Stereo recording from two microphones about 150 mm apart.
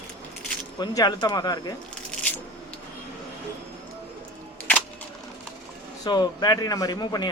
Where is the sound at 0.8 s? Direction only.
25° left (ahead or behind).